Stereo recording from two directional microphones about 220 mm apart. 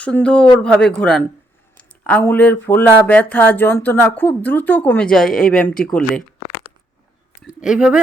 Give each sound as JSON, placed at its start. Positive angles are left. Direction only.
{"t": 0.0, "sound": "speech", "side_deg": 5}
{"t": 7.4, "sound": "speech", "side_deg": -5}